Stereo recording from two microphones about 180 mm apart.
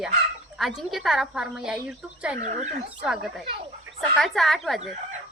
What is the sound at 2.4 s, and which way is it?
Speech, 40° right (ahead or behind).